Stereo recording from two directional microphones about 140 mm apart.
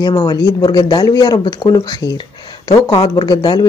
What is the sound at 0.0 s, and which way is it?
Speech, 30° left (ahead or behind).